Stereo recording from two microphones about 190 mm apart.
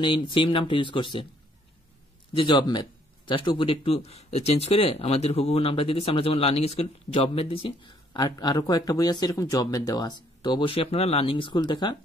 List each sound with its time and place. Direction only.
0.0 s speech: 25° left (ahead or behind)
2.3 s speech: 25° left (ahead or behind)